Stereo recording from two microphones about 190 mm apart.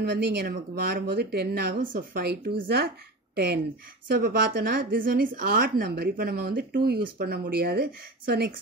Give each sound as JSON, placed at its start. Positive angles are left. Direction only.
{"t": 0.1, "sound": "a woman's voice", "side_deg": -55}